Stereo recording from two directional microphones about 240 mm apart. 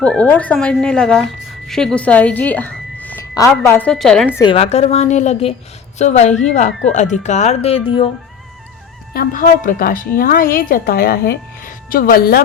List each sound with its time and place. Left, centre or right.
0.0 s a woman's voice: centre
4.4 s speech: left
9.1 s a woman's voice: left